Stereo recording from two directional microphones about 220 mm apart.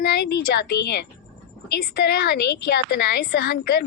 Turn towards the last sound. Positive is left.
turn(degrees=45)  # may be behind; listen again after turning